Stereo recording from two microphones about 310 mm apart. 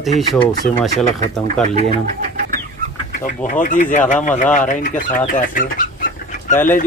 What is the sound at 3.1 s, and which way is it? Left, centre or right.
Speech, left.